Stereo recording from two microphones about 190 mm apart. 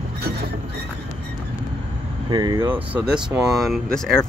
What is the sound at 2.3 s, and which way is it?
Speech, 20° right (ahead or behind).